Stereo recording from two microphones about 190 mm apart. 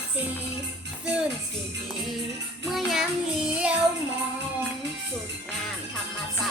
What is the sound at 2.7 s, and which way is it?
Child singing, centre (ahead or behind).